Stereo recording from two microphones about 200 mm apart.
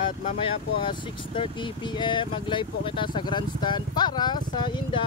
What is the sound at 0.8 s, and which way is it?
Speech, 25° left (ahead or behind).